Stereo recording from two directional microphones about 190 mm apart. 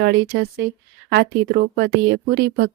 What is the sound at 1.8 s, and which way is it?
Speech, 60° right (ahead or behind).